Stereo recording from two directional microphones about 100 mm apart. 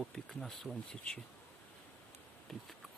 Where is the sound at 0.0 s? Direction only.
5° left (ahead or behind).